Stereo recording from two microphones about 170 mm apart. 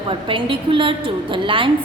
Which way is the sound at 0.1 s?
30° right (ahead or behind).